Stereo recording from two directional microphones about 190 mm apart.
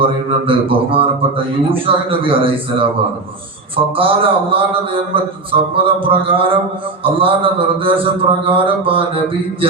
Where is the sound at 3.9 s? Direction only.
30° right (ahead or behind).